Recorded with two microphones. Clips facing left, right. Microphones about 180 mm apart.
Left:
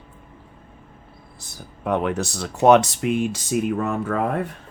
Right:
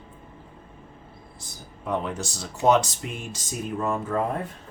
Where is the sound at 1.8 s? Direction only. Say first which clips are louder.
Left 6 dB; 70° left (ahead or behind).